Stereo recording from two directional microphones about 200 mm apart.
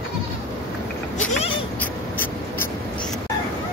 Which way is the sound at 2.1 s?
10° left (ahead or behind).